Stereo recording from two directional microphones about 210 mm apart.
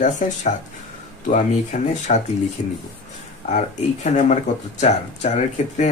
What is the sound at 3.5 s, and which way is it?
Speech, 35° left (ahead or behind).